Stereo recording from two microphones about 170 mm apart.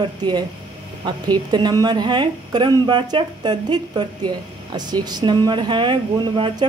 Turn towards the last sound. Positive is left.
turn(degrees=-25)  # may be behind; listen again after turning